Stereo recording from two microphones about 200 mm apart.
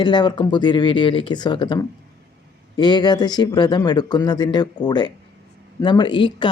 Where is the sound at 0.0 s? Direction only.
20° left (ahead or behind).